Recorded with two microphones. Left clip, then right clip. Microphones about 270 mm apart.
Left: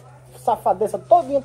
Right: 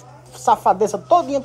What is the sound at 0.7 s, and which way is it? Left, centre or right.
Speech, right.